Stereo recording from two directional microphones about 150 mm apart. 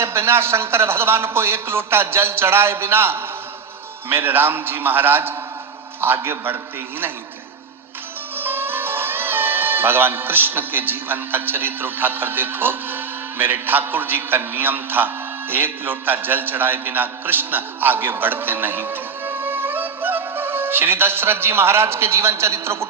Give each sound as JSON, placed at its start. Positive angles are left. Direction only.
{"t": 0.0, "sound": "speech", "side_deg": -15}
{"t": 8.4, "sound": "a man's voice", "side_deg": -15}